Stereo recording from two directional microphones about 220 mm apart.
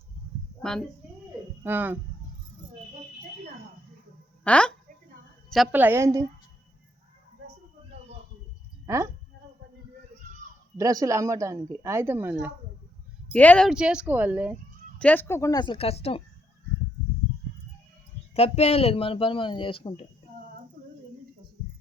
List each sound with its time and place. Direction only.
0.6 s a child's voice: centre (ahead or behind)
1.6 s speech: 10° right (ahead or behind)
4.4 s speech: 5° left (ahead or behind); by 6.2 s 15° right (ahead or behind)
10.8 s speech: 15° right (ahead or behind)
13.3 s a woman's voice: 5° left (ahead or behind)
14.9 s speech: 5° left (ahead or behind); by 16.2 s 25° left (ahead or behind)
18.3 s speech: 30° left (ahead or behind)